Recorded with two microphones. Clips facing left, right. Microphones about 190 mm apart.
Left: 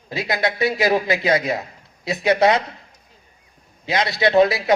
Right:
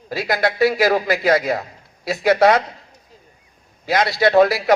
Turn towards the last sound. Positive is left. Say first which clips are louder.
# right 2 dB
turn(degrees=20)  # may be behind; listen again after turning